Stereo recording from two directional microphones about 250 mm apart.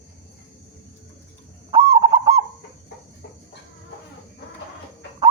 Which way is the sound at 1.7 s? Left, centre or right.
Centre.